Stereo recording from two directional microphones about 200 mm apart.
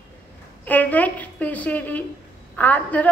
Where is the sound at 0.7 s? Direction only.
10° left (ahead or behind).